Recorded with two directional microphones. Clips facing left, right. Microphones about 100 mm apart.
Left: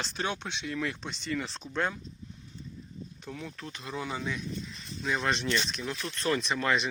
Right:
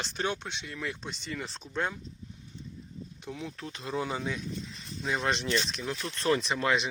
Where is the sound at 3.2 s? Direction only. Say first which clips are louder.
Right 2 dB; 15° right (ahead or behind).